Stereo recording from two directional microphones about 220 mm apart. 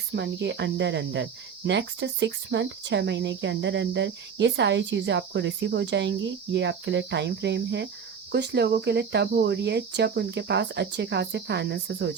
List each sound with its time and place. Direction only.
0.2 s speech: 50° right (ahead or behind)